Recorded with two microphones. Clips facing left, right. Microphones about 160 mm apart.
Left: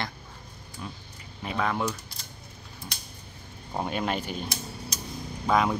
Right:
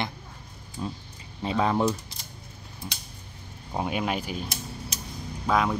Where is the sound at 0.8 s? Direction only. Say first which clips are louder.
Right 6 dB; 25° right (ahead or behind).